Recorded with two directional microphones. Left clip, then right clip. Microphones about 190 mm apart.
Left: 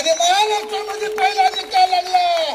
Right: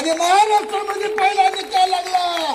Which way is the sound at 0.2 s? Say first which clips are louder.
Right 2 dB; 30° left (ahead or behind).